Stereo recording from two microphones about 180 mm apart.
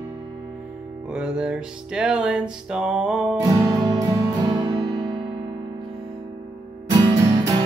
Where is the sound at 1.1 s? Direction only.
5° right (ahead or behind).